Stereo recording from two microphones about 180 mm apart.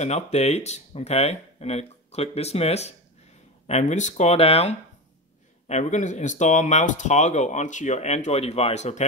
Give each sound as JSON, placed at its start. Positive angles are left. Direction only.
{"t": 0.0, "sound": "speech", "side_deg": 35}